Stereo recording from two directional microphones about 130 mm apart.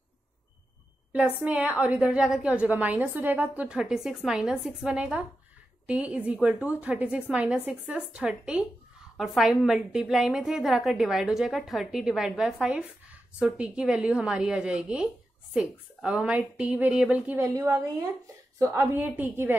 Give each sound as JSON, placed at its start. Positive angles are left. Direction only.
{"t": 1.1, "sound": "a woman's voice", "side_deg": -10}
{"t": 17.6, "sound": "a woman's voice", "side_deg": -20}